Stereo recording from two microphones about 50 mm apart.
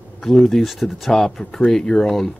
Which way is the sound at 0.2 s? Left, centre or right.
Centre.